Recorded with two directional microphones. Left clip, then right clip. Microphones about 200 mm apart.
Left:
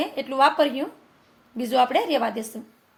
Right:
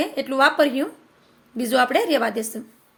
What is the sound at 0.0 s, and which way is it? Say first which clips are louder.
A woman's voice: right 1 dB; 15° right (ahead or behind).